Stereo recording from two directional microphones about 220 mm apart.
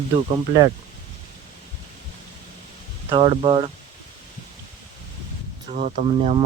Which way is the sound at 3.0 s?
25° right (ahead or behind).